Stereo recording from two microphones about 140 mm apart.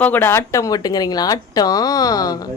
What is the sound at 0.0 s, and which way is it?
Speech, 15° left (ahead or behind).